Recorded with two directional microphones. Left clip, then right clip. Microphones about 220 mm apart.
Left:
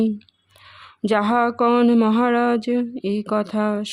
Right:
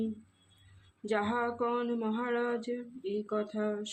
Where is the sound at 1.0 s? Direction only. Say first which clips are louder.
Left 13 dB; 50° left (ahead or behind).